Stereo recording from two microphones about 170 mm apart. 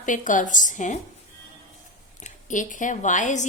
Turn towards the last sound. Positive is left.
turn(degrees=45)  # may be behind; listen again after turning